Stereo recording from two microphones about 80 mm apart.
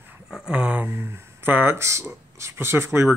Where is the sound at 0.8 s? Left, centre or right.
Right.